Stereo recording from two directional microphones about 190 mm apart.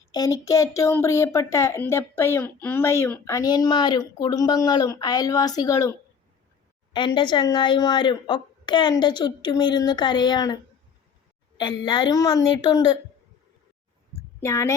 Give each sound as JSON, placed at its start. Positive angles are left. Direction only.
{"t": 0.1, "sound": "speech", "side_deg": 20}
{"t": 6.9, "sound": "speech", "side_deg": 25}
{"t": 14.4, "sound": "speech", "side_deg": 15}